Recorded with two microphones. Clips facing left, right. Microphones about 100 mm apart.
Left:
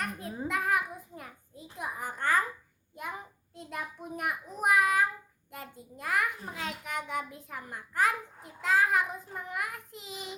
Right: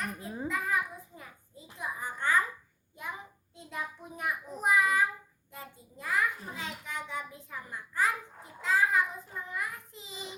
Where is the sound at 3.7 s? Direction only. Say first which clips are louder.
Left 1 dB; 60° left (ahead or behind).